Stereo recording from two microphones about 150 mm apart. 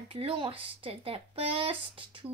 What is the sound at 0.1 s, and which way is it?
A woman's voice, 35° right (ahead or behind).